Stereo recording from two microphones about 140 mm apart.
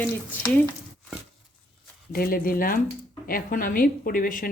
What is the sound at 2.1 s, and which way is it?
A woman's voice, 90° left.